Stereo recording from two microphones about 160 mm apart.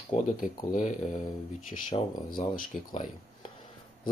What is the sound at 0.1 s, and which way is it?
Speech, 55° left (ahead or behind).